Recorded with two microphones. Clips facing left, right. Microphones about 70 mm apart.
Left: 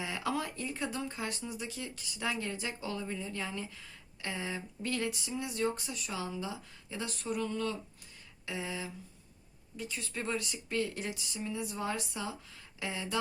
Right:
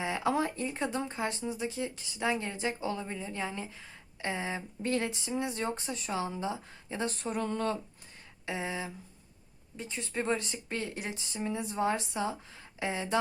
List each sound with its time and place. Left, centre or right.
0.0 s speech: right
8.4 s speech: right